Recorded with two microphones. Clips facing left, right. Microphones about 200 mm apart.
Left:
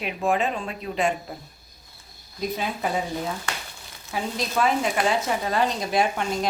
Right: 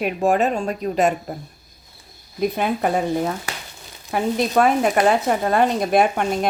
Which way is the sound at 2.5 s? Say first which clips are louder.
Right 4 dB; 55° right (ahead or behind).